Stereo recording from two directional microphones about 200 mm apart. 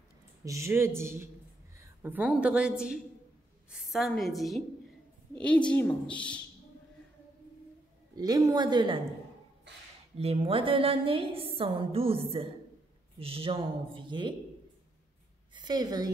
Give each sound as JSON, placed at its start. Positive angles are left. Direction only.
{"t": 0.5, "sound": "a man's voice", "side_deg": -15}
{"t": 8.2, "sound": "a woman's voice", "side_deg": -20}
{"t": 10.1, "sound": "a woman's voice", "side_deg": -30}
{"t": 15.5, "sound": "a woman's voice", "side_deg": -20}